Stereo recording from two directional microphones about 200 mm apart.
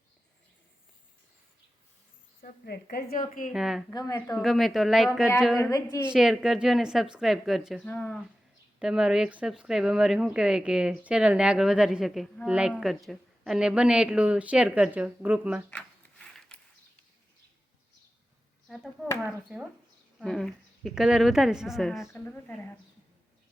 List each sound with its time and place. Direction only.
2.4 s a woman's voice: 50° left (ahead or behind)
3.5 s speech: centre (ahead or behind)
3.8 s a woman's voice: 20° left (ahead or behind)
4.4 s speech: centre (ahead or behind)
5.5 s a woman's voice: 15° left (ahead or behind)
6.1 s a woman's voice: 5° right (ahead or behind)
8.8 s speech: 5° right (ahead or behind)
15.7 s a sound: 5° left (ahead or behind)
19.2 s speech: 5° right (ahead or behind)
22.0 s a woman's voice: 10° left (ahead or behind)